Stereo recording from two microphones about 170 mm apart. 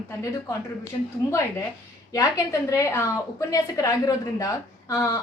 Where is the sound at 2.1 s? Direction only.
20° left (ahead or behind).